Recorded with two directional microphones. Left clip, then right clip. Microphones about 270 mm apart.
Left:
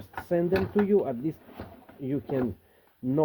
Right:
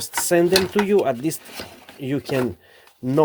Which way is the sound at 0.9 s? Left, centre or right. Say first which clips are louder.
Right 7 dB; right.